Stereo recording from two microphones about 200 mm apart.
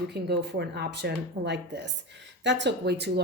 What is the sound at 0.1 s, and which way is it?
A woman's voice, 55° right (ahead or behind).